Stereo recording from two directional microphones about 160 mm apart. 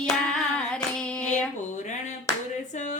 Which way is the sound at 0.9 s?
5° left (ahead or behind).